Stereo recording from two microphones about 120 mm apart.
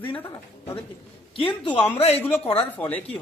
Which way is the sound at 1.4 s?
45° left (ahead or behind).